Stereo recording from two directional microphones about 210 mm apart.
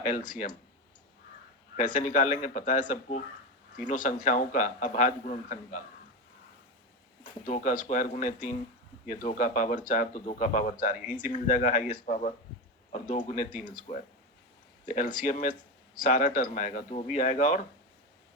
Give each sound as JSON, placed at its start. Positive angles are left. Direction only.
{"t": 0.3, "sound": "a man's voice", "side_deg": 40}
{"t": 1.7, "sound": "a man's voice", "side_deg": 35}
{"t": 7.4, "sound": "a man's voice", "side_deg": 40}